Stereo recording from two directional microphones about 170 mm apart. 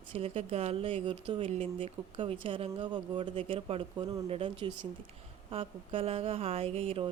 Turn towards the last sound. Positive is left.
turn(degrees=-35)  # may be behind; listen again after turning